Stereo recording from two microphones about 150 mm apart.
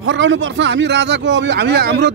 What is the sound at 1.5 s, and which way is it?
Speech, 90° right.